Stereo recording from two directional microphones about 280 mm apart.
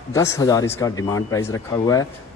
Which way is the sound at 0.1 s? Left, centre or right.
Centre.